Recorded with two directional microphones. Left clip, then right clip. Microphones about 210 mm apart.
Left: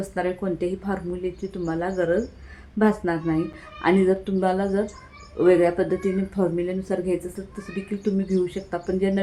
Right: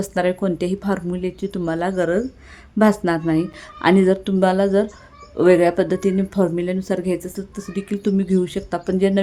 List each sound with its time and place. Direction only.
0.1 s a woman's voice: 55° right (ahead or behind)